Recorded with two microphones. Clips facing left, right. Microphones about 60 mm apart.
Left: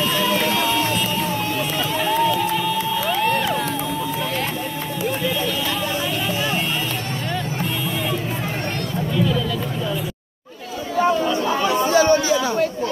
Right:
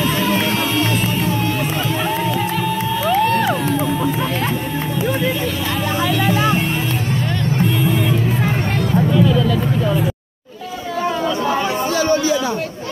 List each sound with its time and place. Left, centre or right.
0.0 s music: right
2.0 s music: right
6.0 s music: right
11.9 s a sound: centre